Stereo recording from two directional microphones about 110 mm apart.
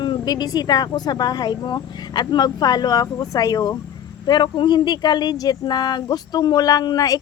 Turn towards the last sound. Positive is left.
turn(degrees=35)  # may be behind; listen again after turning